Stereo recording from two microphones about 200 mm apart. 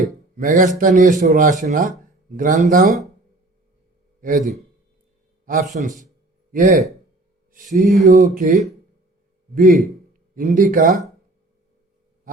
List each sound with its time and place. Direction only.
0.3 s speech: 40° right (ahead or behind)
4.2 s speech: 40° right (ahead or behind)
5.7 s speech: 40° right (ahead or behind)
7.5 s a sound: 40° right (ahead or behind)
8.0 s speech: 40° right (ahead or behind)